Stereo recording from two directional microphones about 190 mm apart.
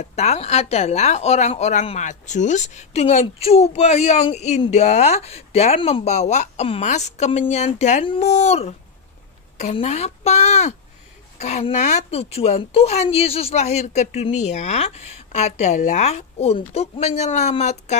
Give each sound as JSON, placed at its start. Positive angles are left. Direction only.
{"t": 0.0, "sound": "a woman's voice", "side_deg": 35}